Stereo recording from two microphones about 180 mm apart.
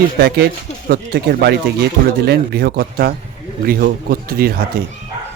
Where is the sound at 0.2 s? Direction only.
60° right (ahead or behind).